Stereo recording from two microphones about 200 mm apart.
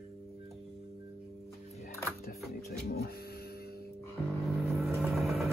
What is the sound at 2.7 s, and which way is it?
Printer, 50° left (ahead or behind).